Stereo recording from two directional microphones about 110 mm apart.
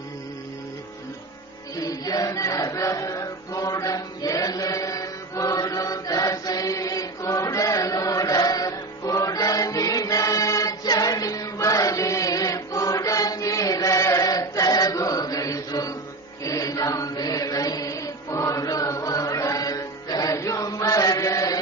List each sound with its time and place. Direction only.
1.7 s music: 35° left (ahead or behind)
16.4 s chant: 30° left (ahead or behind)